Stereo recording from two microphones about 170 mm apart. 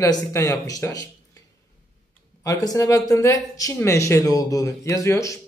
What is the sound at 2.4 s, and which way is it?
Speech, 20° left (ahead or behind).